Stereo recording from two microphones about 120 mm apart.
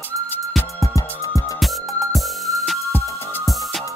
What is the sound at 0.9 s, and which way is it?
Music, 25° left (ahead or behind).